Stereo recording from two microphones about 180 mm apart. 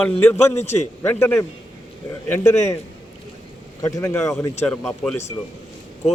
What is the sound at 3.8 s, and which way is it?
Speech, 20° left (ahead or behind).